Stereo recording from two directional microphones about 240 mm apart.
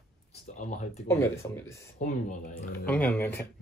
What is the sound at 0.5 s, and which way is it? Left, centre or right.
Speech, left.